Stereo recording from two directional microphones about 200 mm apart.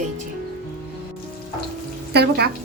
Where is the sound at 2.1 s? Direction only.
55° right (ahead or behind).